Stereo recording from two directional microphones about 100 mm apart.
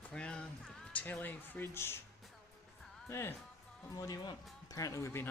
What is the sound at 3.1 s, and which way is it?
Speech, 25° left (ahead or behind).